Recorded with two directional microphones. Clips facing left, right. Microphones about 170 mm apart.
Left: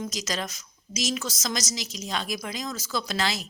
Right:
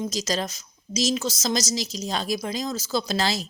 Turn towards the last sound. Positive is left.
turn(degrees=-35)  # may be behind; listen again after turning